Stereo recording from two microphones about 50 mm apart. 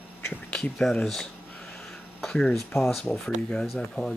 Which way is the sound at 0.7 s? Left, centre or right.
Centre.